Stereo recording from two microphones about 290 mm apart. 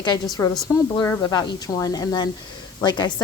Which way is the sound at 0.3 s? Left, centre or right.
Centre.